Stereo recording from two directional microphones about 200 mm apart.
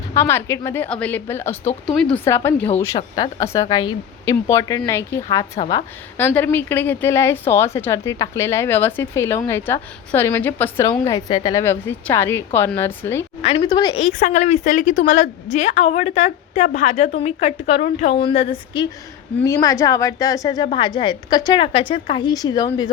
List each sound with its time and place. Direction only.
0.1 s a woman's voice: 10° left (ahead or behind)
5.5 s a woman's voice: 30° left (ahead or behind)
6.1 s a woman's voice: 10° left (ahead or behind)
13.4 s a woman's voice: 30° left (ahead or behind)